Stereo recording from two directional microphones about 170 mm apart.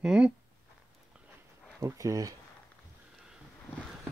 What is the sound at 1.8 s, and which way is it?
Speech, 20° right (ahead or behind).